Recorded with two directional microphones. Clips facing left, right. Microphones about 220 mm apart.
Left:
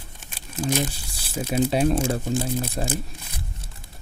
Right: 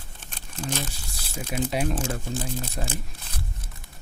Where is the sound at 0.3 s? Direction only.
10° left (ahead or behind).